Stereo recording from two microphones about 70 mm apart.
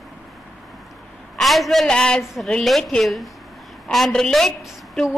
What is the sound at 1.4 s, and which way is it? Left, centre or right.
Speech, centre.